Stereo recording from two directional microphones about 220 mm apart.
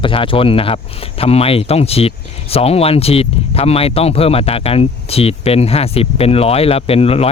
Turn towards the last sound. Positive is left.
turn(degrees=25)  # may be behind; listen again after turning